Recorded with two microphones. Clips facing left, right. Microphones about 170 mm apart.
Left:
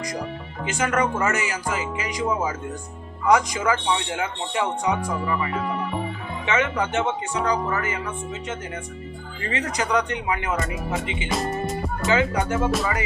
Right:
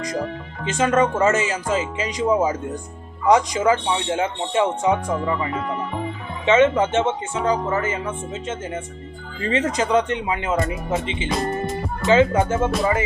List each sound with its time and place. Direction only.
0.8 s speech: 20° right (ahead or behind)
5.5 s music: 5° left (ahead or behind)
6.4 s speech: 25° right (ahead or behind)
11.3 s speech: centre (ahead or behind)
12.0 s speech: 25° right (ahead or behind)